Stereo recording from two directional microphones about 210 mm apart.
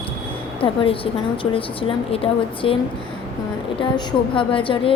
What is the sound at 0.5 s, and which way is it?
A woman's voice, 25° left (ahead or behind).